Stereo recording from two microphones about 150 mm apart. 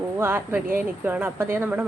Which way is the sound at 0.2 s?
15° right (ahead or behind).